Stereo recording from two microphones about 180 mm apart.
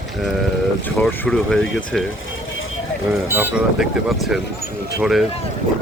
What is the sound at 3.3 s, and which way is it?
Speech, 10° right (ahead or behind).